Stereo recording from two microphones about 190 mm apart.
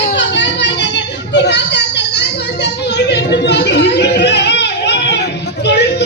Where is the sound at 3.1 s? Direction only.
65° left (ahead or behind).